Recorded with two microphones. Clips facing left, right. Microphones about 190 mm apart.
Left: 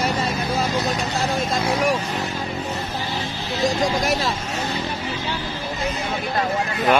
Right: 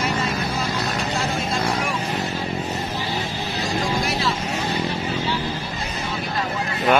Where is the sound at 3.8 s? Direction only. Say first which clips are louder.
Left 2 dB; 40° left (ahead or behind).